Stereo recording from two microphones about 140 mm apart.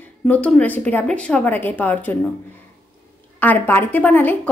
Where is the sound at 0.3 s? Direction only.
10° left (ahead or behind).